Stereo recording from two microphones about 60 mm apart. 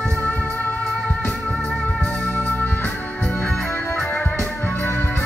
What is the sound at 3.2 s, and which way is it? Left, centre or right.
Music, centre.